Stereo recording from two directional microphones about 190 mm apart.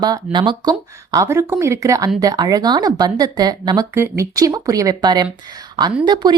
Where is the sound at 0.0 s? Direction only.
25° right (ahead or behind).